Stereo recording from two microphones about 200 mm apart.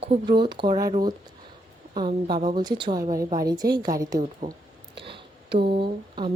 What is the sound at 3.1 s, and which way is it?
Speech, 45° right (ahead or behind).